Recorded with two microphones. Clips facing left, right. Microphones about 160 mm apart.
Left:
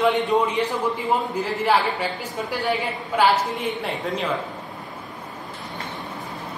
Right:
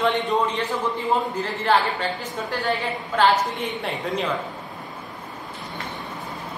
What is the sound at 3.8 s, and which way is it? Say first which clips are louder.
Speech: even; centre (ahead or behind).